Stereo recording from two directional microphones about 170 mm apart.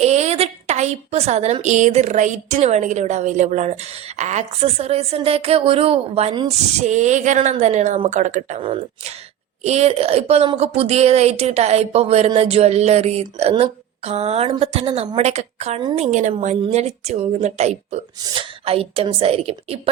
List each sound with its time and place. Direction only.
0.0 s a sound: 40° right (ahead or behind)
1.6 s a woman's voice: 45° right (ahead or behind)
6.7 s a woman's voice: 45° right (ahead or behind)